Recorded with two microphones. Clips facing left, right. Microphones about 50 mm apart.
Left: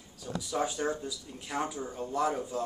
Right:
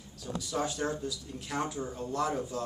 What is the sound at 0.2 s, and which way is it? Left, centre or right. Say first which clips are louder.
Speech: left 1 dB; centre.